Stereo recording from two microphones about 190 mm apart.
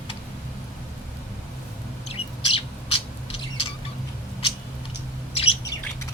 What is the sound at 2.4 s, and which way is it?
Bird, 30° left (ahead or behind).